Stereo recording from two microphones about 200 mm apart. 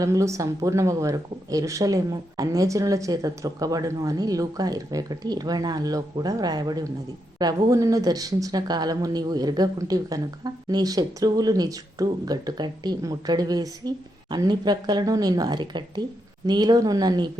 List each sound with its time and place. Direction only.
0.0 s speech: 15° right (ahead or behind)